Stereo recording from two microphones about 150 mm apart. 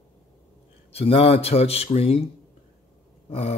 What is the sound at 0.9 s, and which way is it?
Mantra, 40° left (ahead or behind).